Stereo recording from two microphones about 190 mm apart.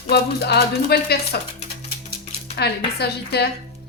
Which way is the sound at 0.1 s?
60° left (ahead or behind).